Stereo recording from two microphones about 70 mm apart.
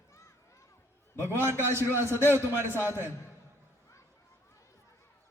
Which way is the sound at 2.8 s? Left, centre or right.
Right.